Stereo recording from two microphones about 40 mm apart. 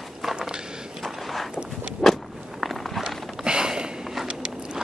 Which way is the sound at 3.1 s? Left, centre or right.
Centre.